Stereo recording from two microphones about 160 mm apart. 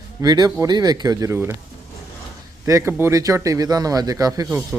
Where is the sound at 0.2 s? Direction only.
25° right (ahead or behind).